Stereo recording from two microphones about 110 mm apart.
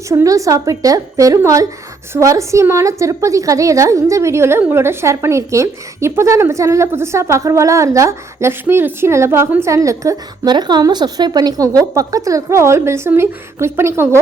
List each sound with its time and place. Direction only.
0.1 s a woman's voice: 30° right (ahead or behind)